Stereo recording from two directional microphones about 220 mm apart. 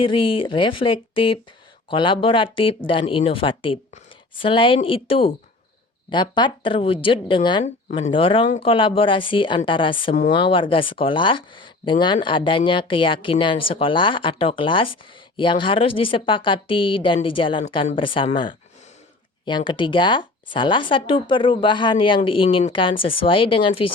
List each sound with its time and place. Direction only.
0.0 s speech: 25° left (ahead or behind)